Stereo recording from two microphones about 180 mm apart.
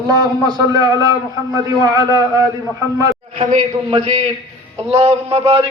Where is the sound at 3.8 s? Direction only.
35° right (ahead or behind).